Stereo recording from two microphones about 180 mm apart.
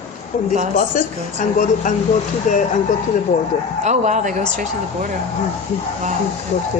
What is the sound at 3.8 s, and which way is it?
Speech, 40° right (ahead or behind).